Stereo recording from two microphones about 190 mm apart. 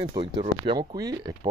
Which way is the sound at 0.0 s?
25° right (ahead or behind).